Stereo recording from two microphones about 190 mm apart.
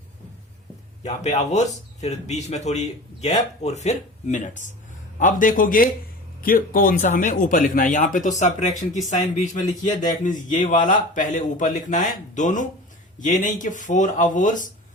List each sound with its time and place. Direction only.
1.0 s speech: 35° left (ahead or behind)